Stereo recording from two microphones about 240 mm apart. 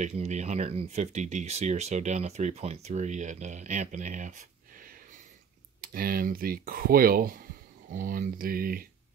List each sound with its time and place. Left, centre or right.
0.0 s speech: right